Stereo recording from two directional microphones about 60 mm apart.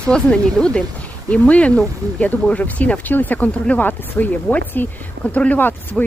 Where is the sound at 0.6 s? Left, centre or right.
Centre.